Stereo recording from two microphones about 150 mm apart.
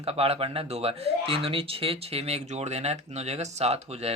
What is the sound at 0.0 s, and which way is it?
Speech, 40° right (ahead or behind).